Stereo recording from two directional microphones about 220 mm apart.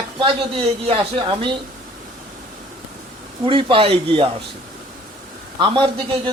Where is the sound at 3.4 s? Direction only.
25° right (ahead or behind).